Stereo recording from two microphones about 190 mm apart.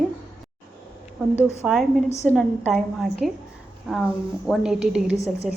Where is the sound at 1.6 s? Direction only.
Centre (ahead or behind).